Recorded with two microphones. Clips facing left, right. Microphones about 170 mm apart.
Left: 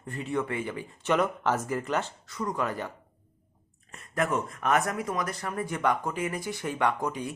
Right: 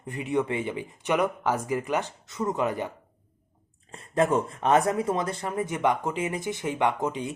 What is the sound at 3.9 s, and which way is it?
Speech, 30° right (ahead or behind).